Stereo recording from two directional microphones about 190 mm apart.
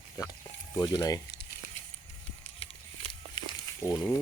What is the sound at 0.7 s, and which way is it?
Speech, 20° left (ahead or behind).